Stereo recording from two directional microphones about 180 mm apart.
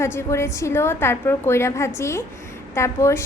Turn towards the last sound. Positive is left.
turn(degrees=15)  # may be behind; listen again after turning